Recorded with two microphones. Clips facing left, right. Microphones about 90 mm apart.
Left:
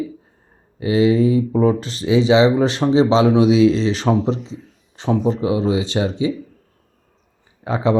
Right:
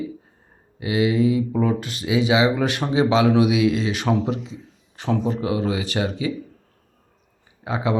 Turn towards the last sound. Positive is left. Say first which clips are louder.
# left 5 dB
turn(degrees=35)  # may be behind; listen again after turning